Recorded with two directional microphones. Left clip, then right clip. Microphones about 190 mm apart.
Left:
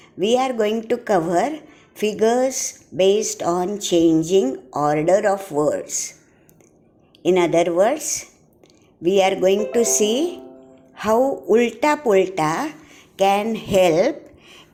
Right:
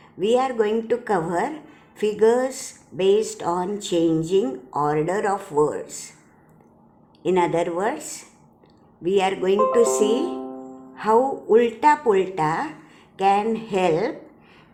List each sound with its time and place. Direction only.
0.2 s a woman's voice: 25° left (ahead or behind)
7.2 s a woman's voice: 25° left (ahead or behind)
10.9 s music: 30° left (ahead or behind)
11.5 s speech: 25° left (ahead or behind)